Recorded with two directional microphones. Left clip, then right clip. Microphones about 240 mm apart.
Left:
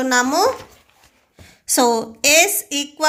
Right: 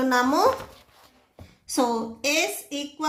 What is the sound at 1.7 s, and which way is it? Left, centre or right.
A woman's voice, left.